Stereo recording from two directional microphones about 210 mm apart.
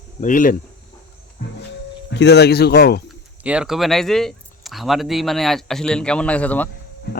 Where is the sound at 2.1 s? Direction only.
55° left (ahead or behind).